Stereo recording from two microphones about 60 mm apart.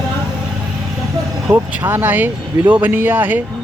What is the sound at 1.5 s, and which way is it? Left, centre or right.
Speech, right.